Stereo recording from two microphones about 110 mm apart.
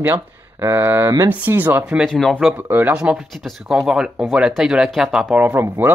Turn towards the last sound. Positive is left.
turn(degrees=-20)  # may be behind; listen again after turning